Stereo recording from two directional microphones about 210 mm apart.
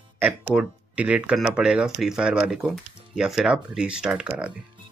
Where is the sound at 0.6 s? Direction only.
5° right (ahead or behind).